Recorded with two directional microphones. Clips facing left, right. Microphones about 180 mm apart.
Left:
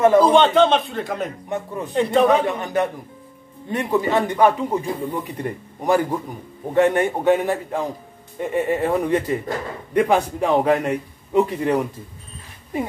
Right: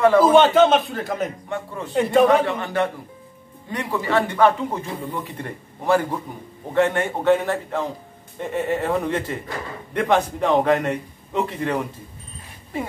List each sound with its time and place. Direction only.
0.2 s a man's voice: 5° right (ahead or behind)
1.5 s speech: 20° left (ahead or behind)
2.0 s a man's voice: centre (ahead or behind)
2.4 s speech: 15° left (ahead or behind)